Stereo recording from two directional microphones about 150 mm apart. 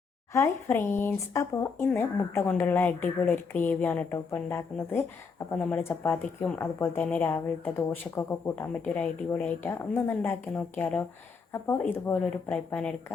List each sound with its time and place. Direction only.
0.3 s speech: 20° left (ahead or behind)